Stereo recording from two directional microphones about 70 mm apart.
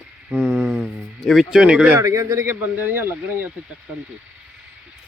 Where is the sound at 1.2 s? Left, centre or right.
Centre.